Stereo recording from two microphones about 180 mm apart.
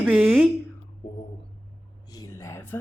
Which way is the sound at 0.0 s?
5° right (ahead or behind).